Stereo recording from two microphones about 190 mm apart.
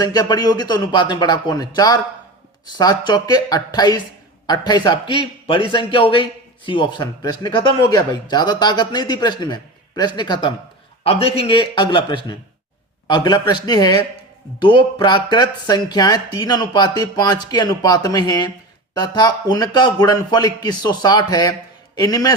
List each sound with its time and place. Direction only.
0.0 s speech: 20° left (ahead or behind)